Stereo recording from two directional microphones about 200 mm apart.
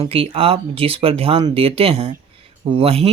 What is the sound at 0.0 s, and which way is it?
Speech, 30° right (ahead or behind).